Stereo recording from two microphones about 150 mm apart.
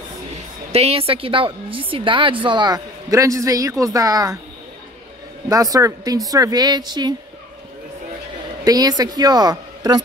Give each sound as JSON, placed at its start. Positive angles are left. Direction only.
{"t": 0.7, "sound": "a woman's voice", "side_deg": -45}
{"t": 5.5, "sound": "a woman's voice", "side_deg": -20}
{"t": 8.6, "sound": "speech", "side_deg": -25}